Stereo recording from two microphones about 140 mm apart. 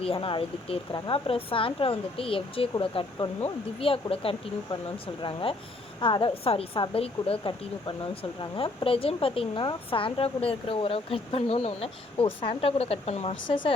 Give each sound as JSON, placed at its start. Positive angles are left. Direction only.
{"t": 0.0, "sound": "speech", "side_deg": 40}